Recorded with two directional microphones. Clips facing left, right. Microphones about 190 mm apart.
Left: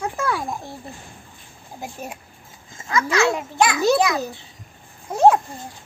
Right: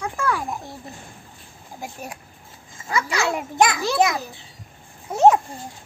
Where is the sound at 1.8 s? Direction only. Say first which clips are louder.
Left 2 dB; centre (ahead or behind).